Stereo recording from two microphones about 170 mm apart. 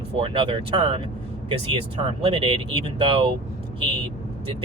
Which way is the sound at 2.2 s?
35° right (ahead or behind).